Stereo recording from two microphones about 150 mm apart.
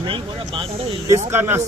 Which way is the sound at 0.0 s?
35° right (ahead or behind).